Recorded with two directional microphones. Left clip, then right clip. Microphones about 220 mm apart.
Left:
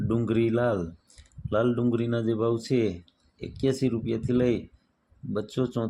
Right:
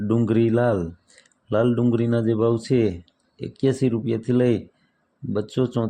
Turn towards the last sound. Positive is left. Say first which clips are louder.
# right 5 dB
turn(degrees=-25)  # may be behind; listen again after turning